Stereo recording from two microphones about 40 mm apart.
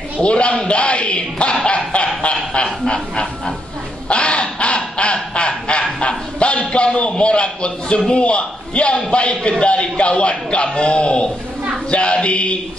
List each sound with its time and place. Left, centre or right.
0.2 s a man's voice: left
2.2 s goose: left
4.1 s goose: left
6.7 s a man's voice: left